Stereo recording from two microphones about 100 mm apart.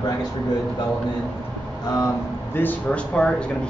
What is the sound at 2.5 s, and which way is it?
Speech, 15° left (ahead or behind).